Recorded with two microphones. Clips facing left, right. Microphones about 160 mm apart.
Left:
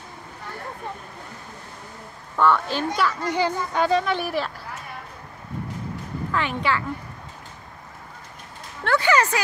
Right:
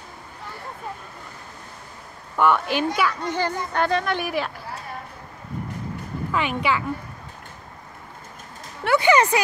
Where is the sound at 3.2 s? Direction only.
10° left (ahead or behind).